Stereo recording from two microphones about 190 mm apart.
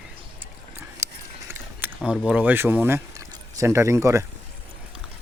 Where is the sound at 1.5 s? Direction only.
10° right (ahead or behind).